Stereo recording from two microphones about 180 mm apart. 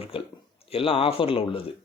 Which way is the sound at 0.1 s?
30° left (ahead or behind).